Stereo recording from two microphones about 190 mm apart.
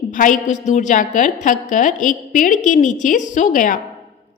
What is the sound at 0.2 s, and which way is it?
A woman's voice, 40° left (ahead or behind).